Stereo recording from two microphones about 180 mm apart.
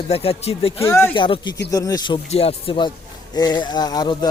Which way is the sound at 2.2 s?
35° left (ahead or behind).